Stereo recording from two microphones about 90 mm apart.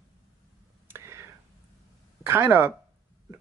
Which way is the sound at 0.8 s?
30° right (ahead or behind).